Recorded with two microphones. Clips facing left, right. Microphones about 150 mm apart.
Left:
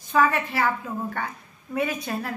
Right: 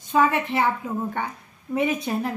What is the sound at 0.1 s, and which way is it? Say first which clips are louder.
A woman's voice: right 1 dB; 20° right (ahead or behind).